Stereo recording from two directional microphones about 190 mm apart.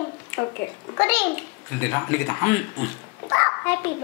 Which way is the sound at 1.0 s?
10° left (ahead or behind).